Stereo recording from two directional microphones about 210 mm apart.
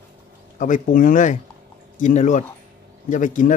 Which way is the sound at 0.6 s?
40° left (ahead or behind).